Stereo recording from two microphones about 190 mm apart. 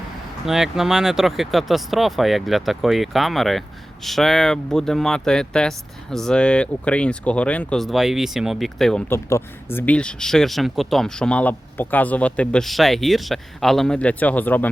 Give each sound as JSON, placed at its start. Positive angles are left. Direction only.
{"t": 0.4, "sound": "speech", "side_deg": 0}